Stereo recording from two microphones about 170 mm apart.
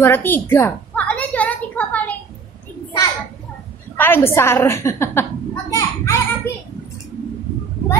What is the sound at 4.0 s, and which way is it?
A woman's voice, 15° left (ahead or behind).